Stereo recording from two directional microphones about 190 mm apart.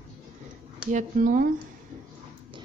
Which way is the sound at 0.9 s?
45° right (ahead or behind).